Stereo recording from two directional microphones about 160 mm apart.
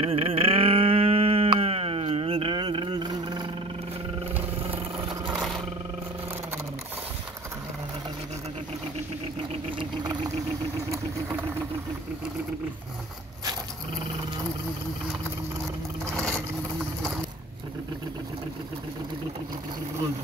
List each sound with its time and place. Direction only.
0.0 s a sound: 35° right (ahead or behind)
5.3 s vehicle: centre (ahead or behind)
9.5 s vehicle: 30° right (ahead or behind)
16.2 s vehicle: 5° left (ahead or behind)